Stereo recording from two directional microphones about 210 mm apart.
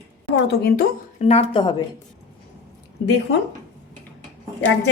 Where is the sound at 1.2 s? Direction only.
30° left (ahead or behind).